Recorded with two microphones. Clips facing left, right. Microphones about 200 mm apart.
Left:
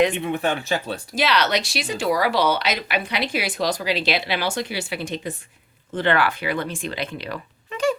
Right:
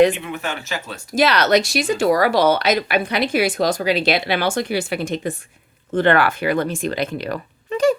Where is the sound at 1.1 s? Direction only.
45° right (ahead or behind).